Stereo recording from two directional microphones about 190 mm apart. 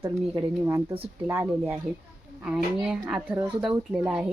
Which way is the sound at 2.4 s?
5° right (ahead or behind).